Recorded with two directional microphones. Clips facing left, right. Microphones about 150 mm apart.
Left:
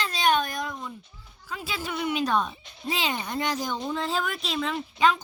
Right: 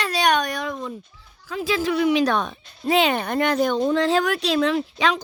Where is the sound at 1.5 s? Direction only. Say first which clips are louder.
Right 10 dB; 90° right.